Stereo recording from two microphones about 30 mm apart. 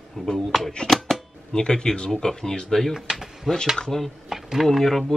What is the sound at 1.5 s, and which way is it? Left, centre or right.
Speech, left.